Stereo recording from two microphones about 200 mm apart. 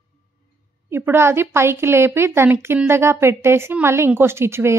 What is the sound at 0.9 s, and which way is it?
A woman's voice, 10° right (ahead or behind).